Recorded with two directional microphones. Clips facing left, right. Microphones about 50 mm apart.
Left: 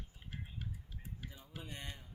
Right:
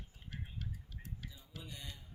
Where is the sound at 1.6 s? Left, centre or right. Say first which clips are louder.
Left 3 dB; left.